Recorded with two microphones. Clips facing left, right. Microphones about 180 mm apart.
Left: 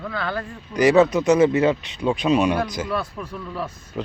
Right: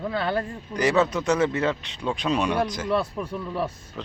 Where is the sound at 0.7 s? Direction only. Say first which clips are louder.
Left 6 dB; 10° left (ahead or behind).